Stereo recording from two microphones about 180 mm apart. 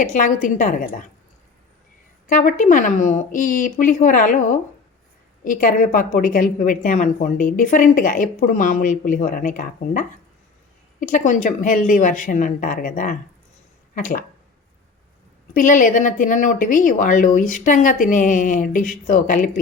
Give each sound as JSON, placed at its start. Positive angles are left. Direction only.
{"t": 0.0, "sound": "a woman's voice", "side_deg": 45}
{"t": 2.3, "sound": "a woman's voice", "side_deg": 45}
{"t": 5.5, "sound": "a woman's voice", "side_deg": 50}
{"t": 15.5, "sound": "a woman's voice", "side_deg": 45}